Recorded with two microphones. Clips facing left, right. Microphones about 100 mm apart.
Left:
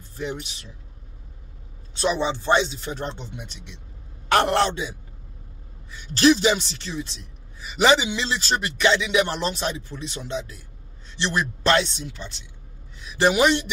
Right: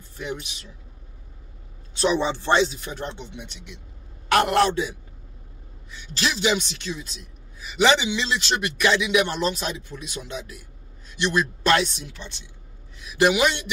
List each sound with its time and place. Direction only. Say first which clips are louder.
0.1 s speech: left 2 dB; 30° left (ahead or behind)
2.2 s a man's voice: even; 15° left (ahead or behind); by 3.3 s 30° left (ahead or behind)
4.3 s a man's voice: right 1 dB; 30° left (ahead or behind)
6.1 s a man's voice: left 6 dB; 35° left (ahead or behind)
12.9 s a sound: even; 30° left (ahead or behind)
13.3 s speech: left 2 dB; 35° left (ahead or behind)